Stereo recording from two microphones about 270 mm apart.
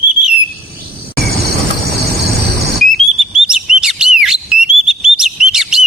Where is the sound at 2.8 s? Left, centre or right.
Centre.